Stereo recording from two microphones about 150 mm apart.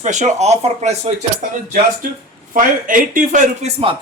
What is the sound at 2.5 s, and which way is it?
Speech, 60° right (ahead or behind).